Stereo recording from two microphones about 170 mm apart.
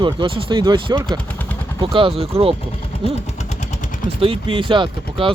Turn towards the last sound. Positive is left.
turn(degrees=-30)  # may be behind; listen again after turning